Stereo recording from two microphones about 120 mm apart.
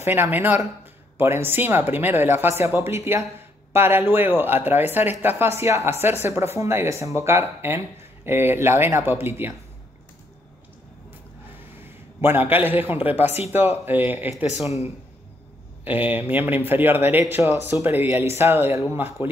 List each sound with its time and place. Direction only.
0.0 s speech: 20° right (ahead or behind)
12.2 s speech: 15° right (ahead or behind)
15.8 s speech: 15° right (ahead or behind)